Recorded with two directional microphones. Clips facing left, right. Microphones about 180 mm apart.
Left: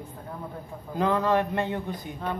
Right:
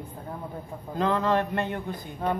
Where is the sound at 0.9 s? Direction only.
15° left (ahead or behind).